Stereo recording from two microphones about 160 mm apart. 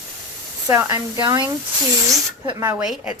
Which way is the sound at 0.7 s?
15° right (ahead or behind).